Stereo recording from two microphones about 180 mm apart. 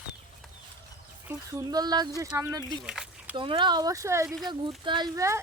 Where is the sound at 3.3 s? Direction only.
25° right (ahead or behind).